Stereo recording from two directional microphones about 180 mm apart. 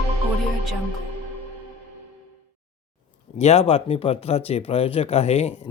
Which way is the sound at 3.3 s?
35° left (ahead or behind).